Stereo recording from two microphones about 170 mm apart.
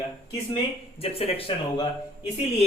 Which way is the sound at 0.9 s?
35° left (ahead or behind).